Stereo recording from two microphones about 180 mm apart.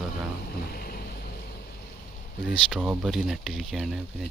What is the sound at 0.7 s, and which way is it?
Vehicle, 55° left (ahead or behind).